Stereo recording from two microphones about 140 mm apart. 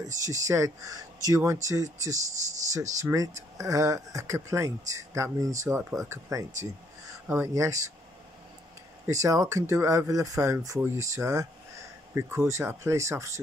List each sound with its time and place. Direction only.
0.0 s speech: 25° right (ahead or behind)
9.0 s speech: 25° right (ahead or behind)